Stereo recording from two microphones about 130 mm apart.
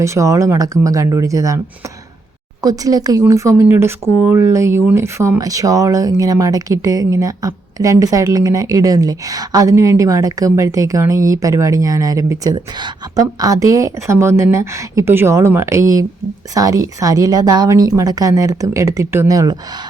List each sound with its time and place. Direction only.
0.0 s speech: 25° right (ahead or behind)